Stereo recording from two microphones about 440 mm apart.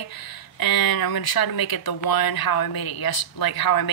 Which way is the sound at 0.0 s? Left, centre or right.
Left.